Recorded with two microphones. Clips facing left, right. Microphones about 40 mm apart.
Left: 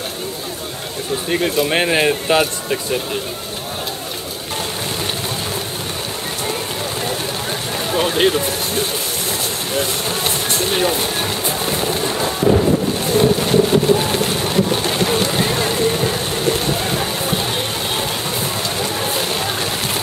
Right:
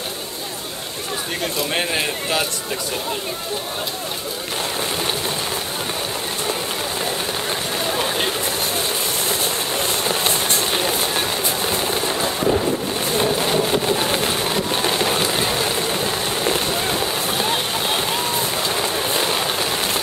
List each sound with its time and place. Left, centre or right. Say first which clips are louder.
1.3 s speech: left 7 dB; centre
10.0 s music: even; centre
13.1 s boat: left 5 dB; centre
14.3 s wind noise: left 3 dB; centre
14.9 s a sound: left 2 dB; centre
15.7 s vehicle: left 4 dB; centre
16.6 s run: left 1 dB; centre
18.9 s vehicle: even; centre